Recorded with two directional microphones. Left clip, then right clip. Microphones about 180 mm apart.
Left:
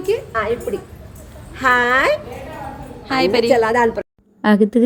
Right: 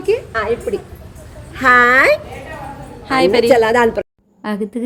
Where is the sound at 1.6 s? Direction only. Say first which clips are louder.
Right 5 dB; 30° right (ahead or behind).